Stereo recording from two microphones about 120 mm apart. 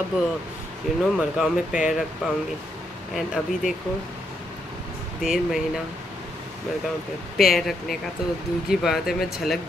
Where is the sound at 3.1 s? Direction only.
5° right (ahead or behind).